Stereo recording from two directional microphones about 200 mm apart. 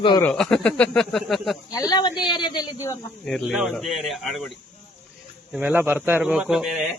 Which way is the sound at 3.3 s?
5° left (ahead or behind).